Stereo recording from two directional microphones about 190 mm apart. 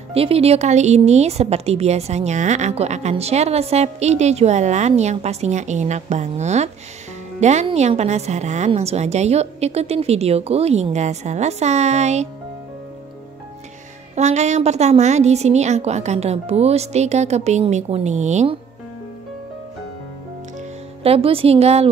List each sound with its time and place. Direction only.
0.1 s speech: 30° right (ahead or behind)
14.1 s speech: 35° right (ahead or behind)
21.0 s speech: 30° right (ahead or behind)